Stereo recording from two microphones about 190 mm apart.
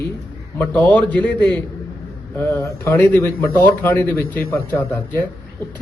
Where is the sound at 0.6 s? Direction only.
10° left (ahead or behind).